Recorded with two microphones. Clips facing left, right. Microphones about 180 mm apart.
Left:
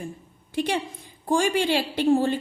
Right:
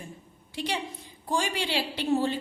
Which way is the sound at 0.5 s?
50° left (ahead or behind).